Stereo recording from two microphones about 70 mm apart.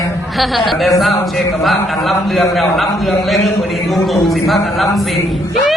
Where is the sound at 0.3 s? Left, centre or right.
Centre.